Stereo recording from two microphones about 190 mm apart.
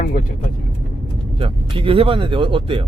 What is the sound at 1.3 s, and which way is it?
Speech, 30° right (ahead or behind).